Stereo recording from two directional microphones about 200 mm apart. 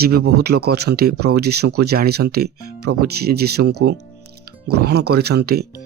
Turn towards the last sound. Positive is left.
turn(degrees=-55)  # may be behind; listen again after turning